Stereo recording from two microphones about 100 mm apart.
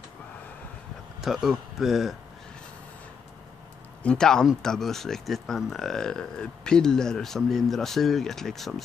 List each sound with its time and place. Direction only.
1.2 s speech: 5° right (ahead or behind)
4.0 s speech: 10° left (ahead or behind)